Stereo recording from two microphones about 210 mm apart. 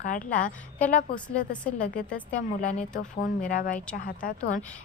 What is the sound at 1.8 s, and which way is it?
Speech, 40° left (ahead or behind).